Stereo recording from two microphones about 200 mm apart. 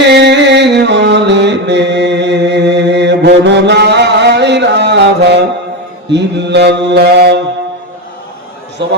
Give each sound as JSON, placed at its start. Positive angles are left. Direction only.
{"t": 0.0, "sound": "music", "side_deg": -60}
{"t": 6.1, "sound": "mantra", "side_deg": -60}
{"t": 8.8, "sound": "a man's voice", "side_deg": -60}